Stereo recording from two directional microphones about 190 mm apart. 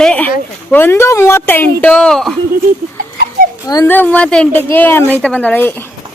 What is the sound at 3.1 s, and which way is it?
Babbling, 50° right (ahead or behind).